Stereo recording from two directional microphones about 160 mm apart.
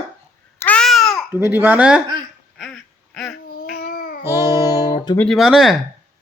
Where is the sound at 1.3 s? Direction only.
15° right (ahead or behind).